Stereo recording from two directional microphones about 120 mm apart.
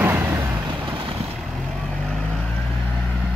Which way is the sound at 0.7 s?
50° right (ahead or behind).